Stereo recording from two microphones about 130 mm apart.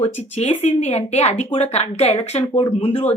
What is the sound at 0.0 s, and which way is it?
Speech, 55° left (ahead or behind).